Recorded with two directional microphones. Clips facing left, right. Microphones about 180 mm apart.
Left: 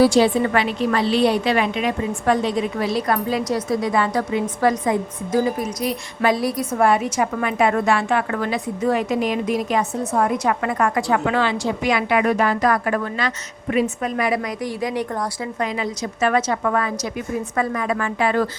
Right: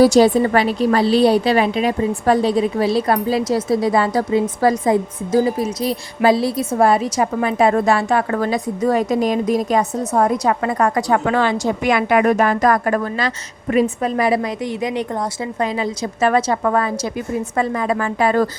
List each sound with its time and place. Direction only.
0.0 s a woman's voice: 40° right (ahead or behind); by 15.0 s 20° right (ahead or behind)
15.6 s a woman's voice: 30° right (ahead or behind)